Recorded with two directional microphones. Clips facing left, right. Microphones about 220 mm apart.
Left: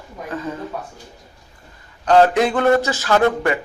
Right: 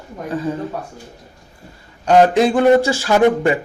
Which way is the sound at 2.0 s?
15° right (ahead or behind).